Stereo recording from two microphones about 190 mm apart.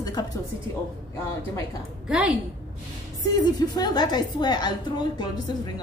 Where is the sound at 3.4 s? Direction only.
20° left (ahead or behind).